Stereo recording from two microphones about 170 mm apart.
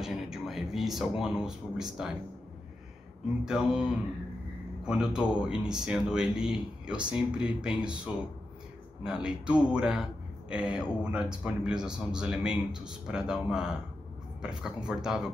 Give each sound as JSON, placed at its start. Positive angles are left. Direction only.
{"t": 0.0, "sound": "speech", "side_deg": 0}
{"t": 3.4, "sound": "speech", "side_deg": -5}